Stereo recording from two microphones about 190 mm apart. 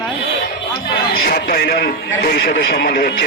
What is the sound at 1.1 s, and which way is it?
A man's voice, 55° left (ahead or behind).